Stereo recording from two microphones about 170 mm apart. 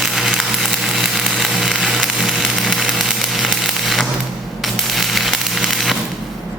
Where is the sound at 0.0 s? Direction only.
Centre (ahead or behind).